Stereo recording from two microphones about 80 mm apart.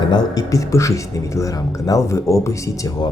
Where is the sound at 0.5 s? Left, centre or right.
Left.